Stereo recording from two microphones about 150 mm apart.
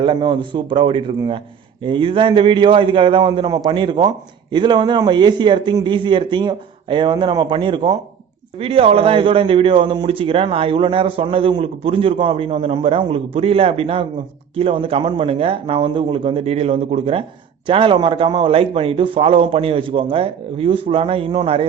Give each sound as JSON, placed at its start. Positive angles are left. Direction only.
{"t": 0.0, "sound": "a man's voice", "side_deg": -35}